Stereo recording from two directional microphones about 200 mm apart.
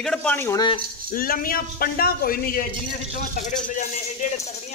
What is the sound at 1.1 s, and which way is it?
Speech, 45° left (ahead or behind).